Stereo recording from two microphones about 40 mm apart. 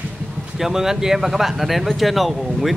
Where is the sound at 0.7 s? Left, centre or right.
Centre.